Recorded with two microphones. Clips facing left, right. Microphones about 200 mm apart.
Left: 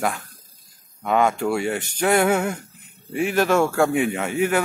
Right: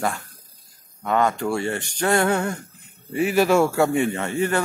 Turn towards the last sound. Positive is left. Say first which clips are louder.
# left 1 dB
turn(degrees=10)  # may be behind; listen again after turning